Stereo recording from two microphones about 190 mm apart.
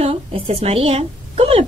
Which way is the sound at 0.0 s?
30° right (ahead or behind).